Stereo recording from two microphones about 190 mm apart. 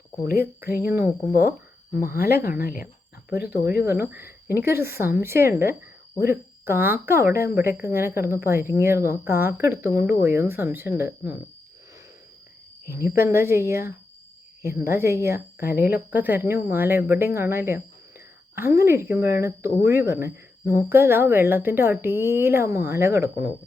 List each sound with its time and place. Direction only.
0.3 s speech: 55° left (ahead or behind)
0.9 s speech: 10° right (ahead or behind)
2.6 s speech: 50° left (ahead or behind)
3.9 s speech: 10° right (ahead or behind)
12.8 s speech: 15° right (ahead or behind)